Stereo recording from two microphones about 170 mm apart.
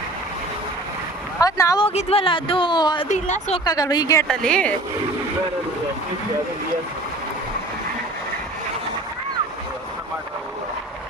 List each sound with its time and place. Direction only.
1.4 s a sound: 20° left (ahead or behind)
1.8 s speech: 40° left (ahead or behind)
3.1 s a woman's voice: 45° left (ahead or behind)
3.6 s a woman's voice: 25° left (ahead or behind)
4.3 s a woman's voice: 5° left (ahead or behind)